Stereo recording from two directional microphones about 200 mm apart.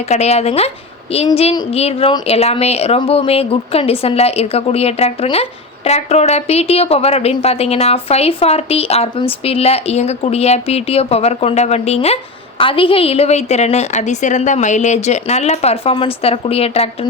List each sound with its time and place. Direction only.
0.1 s a woman's voice: 30° left (ahead or behind)